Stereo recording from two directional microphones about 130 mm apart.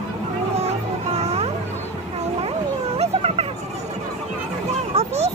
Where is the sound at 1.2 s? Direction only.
55° right (ahead or behind).